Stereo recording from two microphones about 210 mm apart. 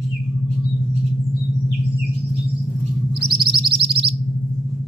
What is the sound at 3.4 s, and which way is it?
Music, 25° right (ahead or behind).